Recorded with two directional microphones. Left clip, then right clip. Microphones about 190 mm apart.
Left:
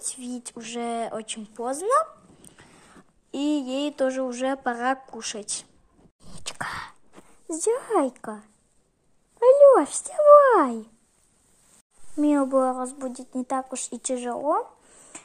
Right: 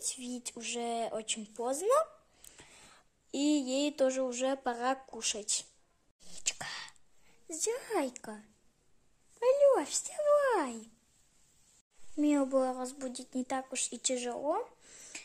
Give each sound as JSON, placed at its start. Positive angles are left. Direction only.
{"t": 0.0, "sound": "a woman's voice", "side_deg": 0}
{"t": 6.2, "sound": "whispering", "side_deg": 10}
{"t": 7.4, "sound": "speech", "side_deg": 15}
{"t": 7.9, "sound": "speech", "side_deg": 0}
{"t": 9.4, "sound": "speech", "side_deg": 10}
{"t": 12.2, "sound": "speech", "side_deg": 5}
{"t": 13.3, "sound": "speech", "side_deg": -5}
{"t": 13.7, "sound": "a woman's voice", "side_deg": 10}